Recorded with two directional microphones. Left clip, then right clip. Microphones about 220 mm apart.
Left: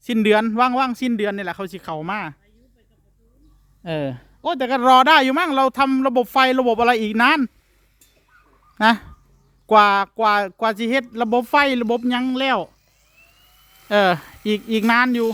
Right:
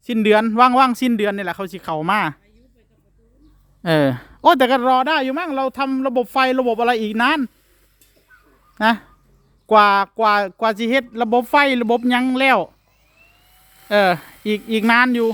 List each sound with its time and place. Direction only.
0.0 s speech: 5° left (ahead or behind); by 2.4 s 15° right (ahead or behind)
3.8 s speech: 25° right (ahead or behind)
4.8 s speech: 15° left (ahead or behind)
8.8 s speech: 5° left (ahead or behind)
13.8 s speech: 10° left (ahead or behind)